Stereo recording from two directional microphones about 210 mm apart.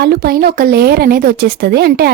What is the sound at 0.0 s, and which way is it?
Speech, 50° right (ahead or behind).